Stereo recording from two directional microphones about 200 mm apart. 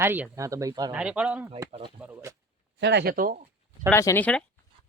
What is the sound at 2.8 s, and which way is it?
Speech, 55° right (ahead or behind).